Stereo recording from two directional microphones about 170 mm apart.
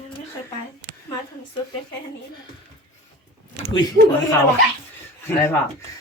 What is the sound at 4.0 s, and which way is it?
Speech, 65° right (ahead or behind).